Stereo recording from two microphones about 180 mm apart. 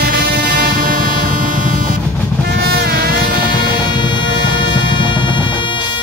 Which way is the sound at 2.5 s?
60° right (ahead or behind).